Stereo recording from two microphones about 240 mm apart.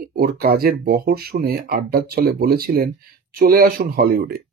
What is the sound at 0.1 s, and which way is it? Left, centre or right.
Speech, right.